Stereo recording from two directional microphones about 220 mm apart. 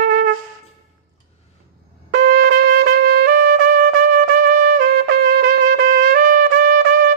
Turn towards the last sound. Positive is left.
turn(degrees=-45)  # may be behind; listen again after turning